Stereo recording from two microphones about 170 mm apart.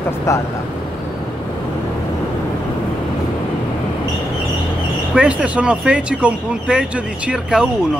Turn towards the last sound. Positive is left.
turn(degrees=-5)  # may be behind; listen again after turning